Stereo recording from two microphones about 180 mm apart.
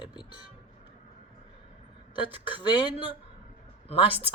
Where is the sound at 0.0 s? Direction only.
25° left (ahead or behind).